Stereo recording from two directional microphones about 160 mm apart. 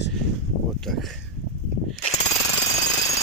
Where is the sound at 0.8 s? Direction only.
Centre (ahead or behind).